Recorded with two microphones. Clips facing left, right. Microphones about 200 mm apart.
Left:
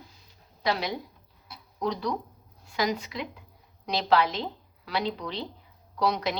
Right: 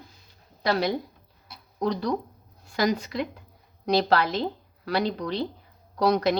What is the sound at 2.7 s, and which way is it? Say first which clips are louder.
A woman's voice: right 4 dB; 50° right (ahead or behind).